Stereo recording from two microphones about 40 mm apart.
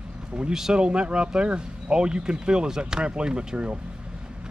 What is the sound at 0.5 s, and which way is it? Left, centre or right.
Speech, centre.